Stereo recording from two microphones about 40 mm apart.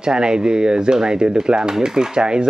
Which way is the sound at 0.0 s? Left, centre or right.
Centre.